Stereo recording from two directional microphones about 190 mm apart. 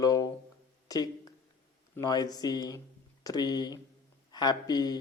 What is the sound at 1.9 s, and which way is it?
Speech, 20° left (ahead or behind).